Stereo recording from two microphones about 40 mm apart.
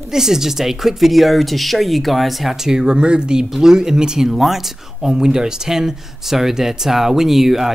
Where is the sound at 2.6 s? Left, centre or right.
Centre.